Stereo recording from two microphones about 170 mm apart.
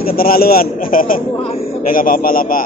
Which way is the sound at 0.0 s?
60° left (ahead or behind).